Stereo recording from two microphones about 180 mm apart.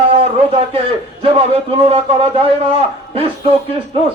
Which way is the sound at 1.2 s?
30° right (ahead or behind).